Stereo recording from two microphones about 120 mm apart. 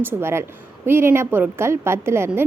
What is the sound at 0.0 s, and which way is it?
A woman's voice, 20° right (ahead or behind).